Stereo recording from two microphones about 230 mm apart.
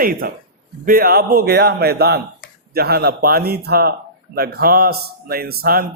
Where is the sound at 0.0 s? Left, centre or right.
Right.